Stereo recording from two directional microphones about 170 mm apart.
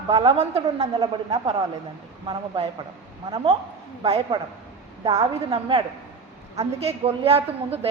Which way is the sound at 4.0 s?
30° right (ahead or behind).